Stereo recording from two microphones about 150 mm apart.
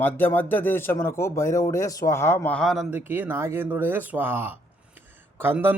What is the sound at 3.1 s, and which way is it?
Speech, 15° right (ahead or behind).